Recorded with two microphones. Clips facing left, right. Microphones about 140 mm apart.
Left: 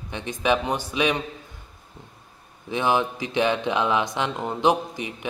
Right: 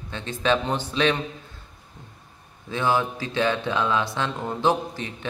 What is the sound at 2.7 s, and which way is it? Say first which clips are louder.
Speech: left 1 dB; 20° left (ahead or behind).